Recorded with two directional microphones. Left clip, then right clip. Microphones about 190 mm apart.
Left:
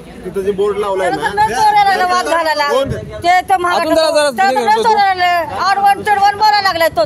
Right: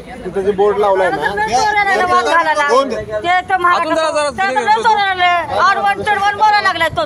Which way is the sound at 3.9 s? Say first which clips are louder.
Left 3 dB; 45° left (ahead or behind).